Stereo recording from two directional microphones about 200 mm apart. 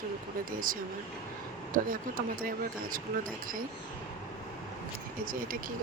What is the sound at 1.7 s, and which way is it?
Speech, 45° right (ahead or behind).